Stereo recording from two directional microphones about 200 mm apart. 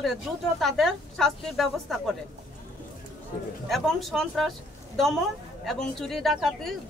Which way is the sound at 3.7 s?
Centre (ahead or behind).